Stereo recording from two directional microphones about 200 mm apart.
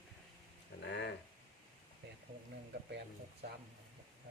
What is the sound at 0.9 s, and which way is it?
Speech, 60° left (ahead or behind).